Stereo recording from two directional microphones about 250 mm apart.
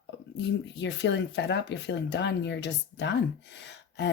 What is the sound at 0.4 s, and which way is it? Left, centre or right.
Speech, left.